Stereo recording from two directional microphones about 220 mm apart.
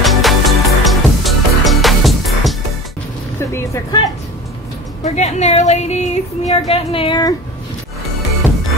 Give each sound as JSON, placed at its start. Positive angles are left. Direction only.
{"t": 0.0, "sound": "music", "side_deg": 0}
{"t": 3.3, "sound": "vehicle", "side_deg": 10}
{"t": 5.0, "sound": "speech", "side_deg": 30}